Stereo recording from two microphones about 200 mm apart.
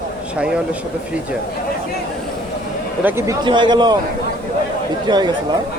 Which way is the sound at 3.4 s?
25° right (ahead or behind).